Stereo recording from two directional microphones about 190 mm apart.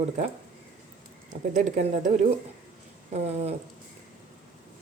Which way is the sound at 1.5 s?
40° right (ahead or behind).